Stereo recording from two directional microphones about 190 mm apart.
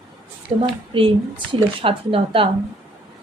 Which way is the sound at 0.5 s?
30° right (ahead or behind).